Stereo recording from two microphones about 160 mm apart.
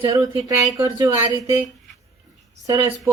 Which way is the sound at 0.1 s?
20° right (ahead or behind).